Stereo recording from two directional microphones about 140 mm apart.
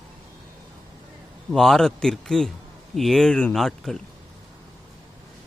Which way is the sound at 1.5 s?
5° left (ahead or behind).